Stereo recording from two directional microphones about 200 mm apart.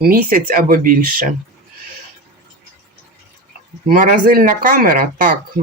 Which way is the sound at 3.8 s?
40° right (ahead or behind).